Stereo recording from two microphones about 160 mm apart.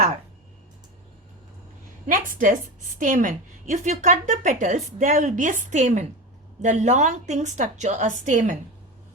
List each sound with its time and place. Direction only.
2.0 s a woman's voice: 55° right (ahead or behind)